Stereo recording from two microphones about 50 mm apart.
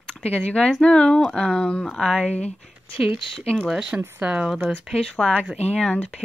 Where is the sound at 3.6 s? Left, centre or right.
Centre.